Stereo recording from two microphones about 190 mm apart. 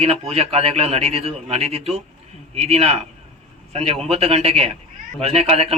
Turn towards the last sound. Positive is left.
turn(degrees=-35)  # may be behind; listen again after turning